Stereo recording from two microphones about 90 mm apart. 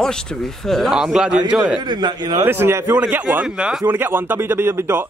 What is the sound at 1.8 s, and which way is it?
Speech, 55° right (ahead or behind).